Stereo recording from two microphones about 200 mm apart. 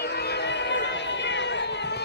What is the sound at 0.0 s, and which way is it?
Run, 55° left (ahead or behind).